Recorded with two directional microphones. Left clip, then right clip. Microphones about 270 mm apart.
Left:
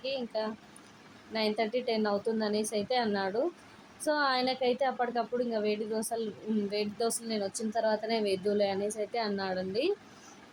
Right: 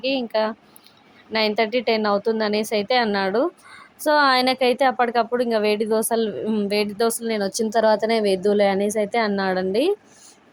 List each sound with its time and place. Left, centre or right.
0.0 s a woman's voice: right